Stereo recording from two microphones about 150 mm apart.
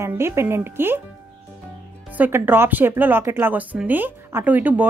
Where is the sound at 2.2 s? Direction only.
15° right (ahead or behind).